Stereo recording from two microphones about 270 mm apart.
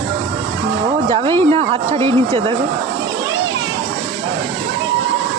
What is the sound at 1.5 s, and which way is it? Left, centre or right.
Speech, right.